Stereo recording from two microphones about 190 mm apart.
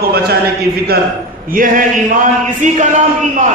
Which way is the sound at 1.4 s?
45° right (ahead or behind).